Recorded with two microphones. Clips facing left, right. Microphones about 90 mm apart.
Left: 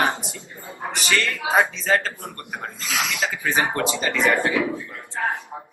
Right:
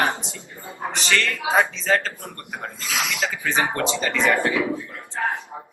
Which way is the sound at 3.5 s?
10° left (ahead or behind).